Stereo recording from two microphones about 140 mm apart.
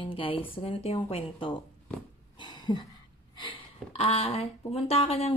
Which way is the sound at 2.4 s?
30° left (ahead or behind).